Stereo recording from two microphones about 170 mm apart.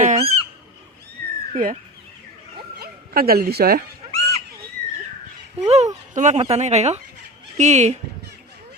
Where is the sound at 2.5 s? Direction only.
65° right (ahead or behind).